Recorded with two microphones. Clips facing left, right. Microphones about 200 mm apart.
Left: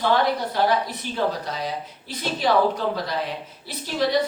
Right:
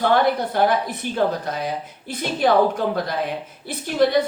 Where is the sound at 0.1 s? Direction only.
55° right (ahead or behind).